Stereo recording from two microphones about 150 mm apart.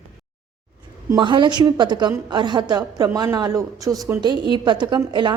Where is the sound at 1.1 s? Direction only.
30° right (ahead or behind).